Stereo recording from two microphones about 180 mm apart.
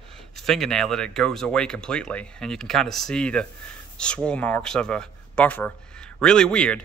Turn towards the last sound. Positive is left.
turn(degrees=5)  # may be behind; listen again after turning